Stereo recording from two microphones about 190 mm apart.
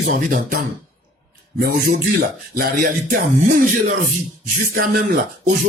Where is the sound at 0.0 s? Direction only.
50° right (ahead or behind).